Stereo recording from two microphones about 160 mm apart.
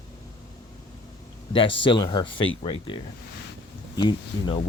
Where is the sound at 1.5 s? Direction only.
35° left (ahead or behind).